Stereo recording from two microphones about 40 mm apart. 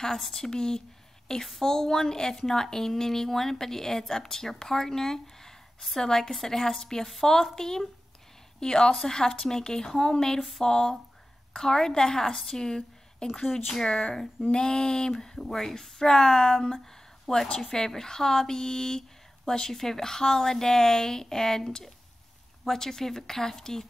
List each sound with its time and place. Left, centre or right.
0.3 s a woman's voice: centre
13.3 s a woman's voice: centre
13.8 s a woman's voice: left